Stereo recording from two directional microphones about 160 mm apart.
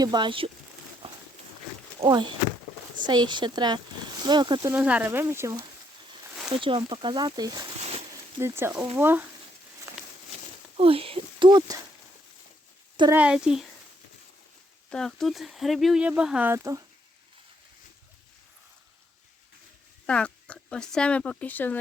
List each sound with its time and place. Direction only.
0.0 s speech: 25° right (ahead or behind)
2.0 s speech: 30° right (ahead or behind)
4.7 s speech: 10° right (ahead or behind)
6.5 s speech: 35° right (ahead or behind)
7.8 s a sound: 40° right (ahead or behind)
8.4 s speech: 15° right (ahead or behind)
10.8 s speech: 35° right (ahead or behind)
13.1 s speech: 10° right (ahead or behind)
14.8 s speech: 5° left (ahead or behind); by 16.8 s 20° right (ahead or behind)
20.1 s speech: 5° left (ahead or behind)